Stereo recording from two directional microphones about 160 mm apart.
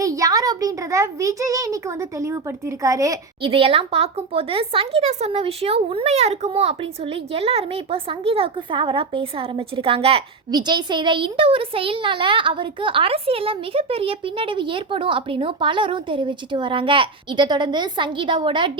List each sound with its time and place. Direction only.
0.0 s a child's voice: 20° right (ahead or behind)
3.4 s a woman's voice: 35° right (ahead or behind)